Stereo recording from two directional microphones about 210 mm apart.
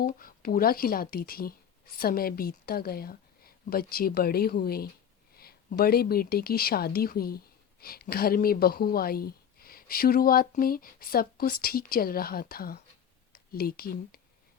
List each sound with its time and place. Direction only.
0.0 s speech: 40° left (ahead or behind)